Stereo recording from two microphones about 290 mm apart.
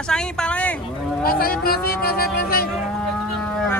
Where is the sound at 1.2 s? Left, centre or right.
Left.